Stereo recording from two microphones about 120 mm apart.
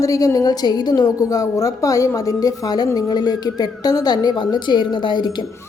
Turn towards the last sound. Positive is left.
turn(degrees=40)  # may be behind; listen again after turning